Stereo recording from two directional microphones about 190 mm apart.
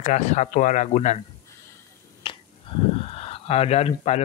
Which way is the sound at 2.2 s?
25° left (ahead or behind).